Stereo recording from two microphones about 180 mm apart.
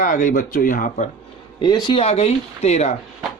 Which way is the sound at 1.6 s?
25° left (ahead or behind).